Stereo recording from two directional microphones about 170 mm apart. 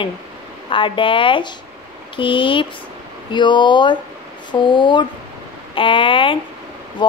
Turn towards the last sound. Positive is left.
turn(degrees=30)  # may be behind; listen again after turning